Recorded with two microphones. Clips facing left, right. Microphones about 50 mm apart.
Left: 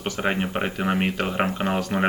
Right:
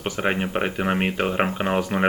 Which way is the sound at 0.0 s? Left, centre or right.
Centre.